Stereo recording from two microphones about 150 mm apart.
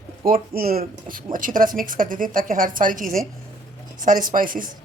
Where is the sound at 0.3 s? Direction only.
80° right.